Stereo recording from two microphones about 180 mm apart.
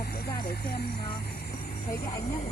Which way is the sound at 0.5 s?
60° left (ahead or behind).